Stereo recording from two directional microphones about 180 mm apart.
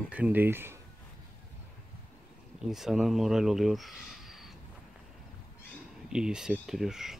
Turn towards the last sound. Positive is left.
turn(degrees=-5)  # may be behind; listen again after turning